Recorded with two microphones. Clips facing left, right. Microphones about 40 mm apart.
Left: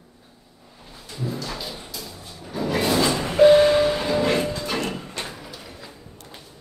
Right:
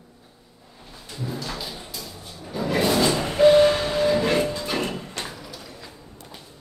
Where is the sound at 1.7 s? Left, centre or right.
Centre.